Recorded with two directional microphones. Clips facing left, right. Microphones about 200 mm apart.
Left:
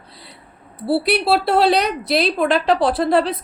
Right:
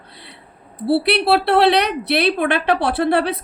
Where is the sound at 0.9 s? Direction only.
65° right (ahead or behind).